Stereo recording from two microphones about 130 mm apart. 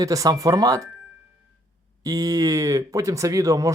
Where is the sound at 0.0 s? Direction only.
25° right (ahead or behind).